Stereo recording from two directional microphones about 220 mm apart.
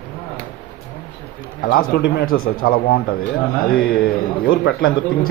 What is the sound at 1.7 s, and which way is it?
Speech, 45° left (ahead or behind).